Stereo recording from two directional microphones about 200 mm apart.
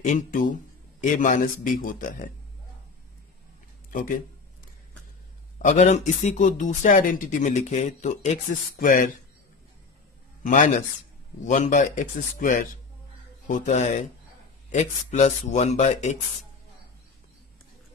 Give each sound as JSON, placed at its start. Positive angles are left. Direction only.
{"t": 0.0, "sound": "speech", "side_deg": 40}
{"t": 3.9, "sound": "speech", "side_deg": 40}
{"t": 5.6, "sound": "speech", "side_deg": 40}
{"t": 10.4, "sound": "speech", "side_deg": 40}